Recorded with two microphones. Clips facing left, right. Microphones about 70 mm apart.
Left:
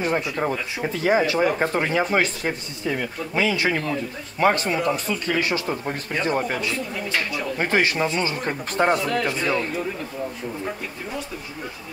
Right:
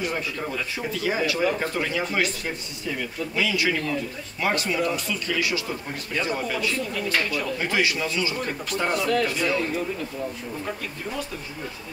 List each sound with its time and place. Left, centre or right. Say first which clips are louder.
0.0 s speech: left 5 dB; left
6.7 s speech: even; left
7.5 s speech: left 5 dB; left